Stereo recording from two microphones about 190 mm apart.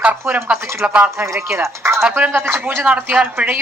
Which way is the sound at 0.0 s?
10° right (ahead or behind).